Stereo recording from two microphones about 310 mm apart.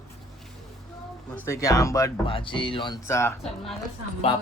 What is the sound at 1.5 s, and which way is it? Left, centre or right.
Speech, centre.